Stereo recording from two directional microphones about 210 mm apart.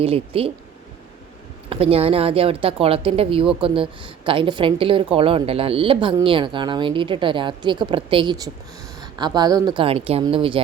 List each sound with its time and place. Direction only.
0.0 s speech: 25° right (ahead or behind)
1.7 s speech: 25° right (ahead or behind)